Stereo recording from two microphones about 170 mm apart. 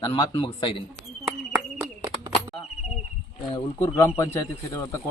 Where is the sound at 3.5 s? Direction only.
20° left (ahead or behind).